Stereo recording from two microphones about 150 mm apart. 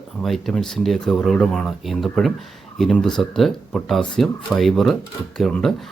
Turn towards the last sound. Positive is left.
turn(degrees=5)  # may be behind; listen again after turning